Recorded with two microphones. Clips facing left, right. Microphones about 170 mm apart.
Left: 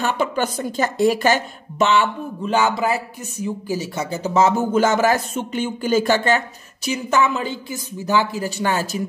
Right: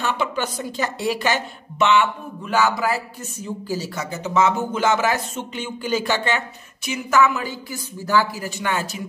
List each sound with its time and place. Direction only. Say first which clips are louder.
0.0 s a woman's voice: left 3 dB; 50° left (ahead or behind)